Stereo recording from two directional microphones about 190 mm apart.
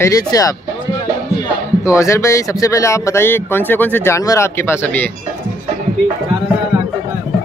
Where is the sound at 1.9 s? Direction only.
15° left (ahead or behind).